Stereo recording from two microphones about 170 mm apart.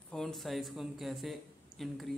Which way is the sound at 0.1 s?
Centre (ahead or behind).